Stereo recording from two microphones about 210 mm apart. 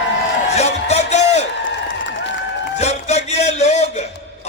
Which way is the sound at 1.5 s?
60° left (ahead or behind).